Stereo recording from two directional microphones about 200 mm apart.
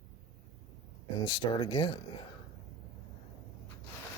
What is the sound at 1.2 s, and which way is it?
Speech, 25° left (ahead or behind).